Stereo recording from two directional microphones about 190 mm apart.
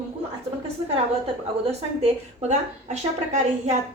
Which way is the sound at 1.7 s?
35° right (ahead or behind).